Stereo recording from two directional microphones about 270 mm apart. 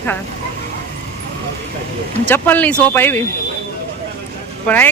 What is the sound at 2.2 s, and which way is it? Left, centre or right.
Speech, centre.